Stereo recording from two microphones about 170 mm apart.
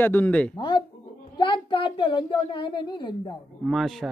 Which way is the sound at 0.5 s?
30° left (ahead or behind).